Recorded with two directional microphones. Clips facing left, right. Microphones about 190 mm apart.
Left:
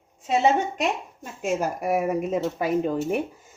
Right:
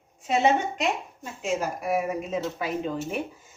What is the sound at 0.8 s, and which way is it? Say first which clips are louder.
A woman's voice: left 1 dB; 50° left (ahead or behind).